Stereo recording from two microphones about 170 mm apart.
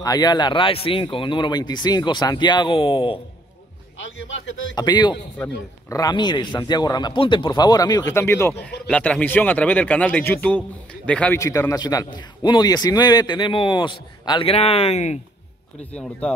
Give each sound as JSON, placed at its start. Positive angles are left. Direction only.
{"t": 0.0, "sound": "a man's voice", "side_deg": 25}
{"t": 4.0, "sound": "a man's voice", "side_deg": 90}
{"t": 4.7, "sound": "a man's voice", "side_deg": 25}
{"t": 15.8, "sound": "a man's voice", "side_deg": 10}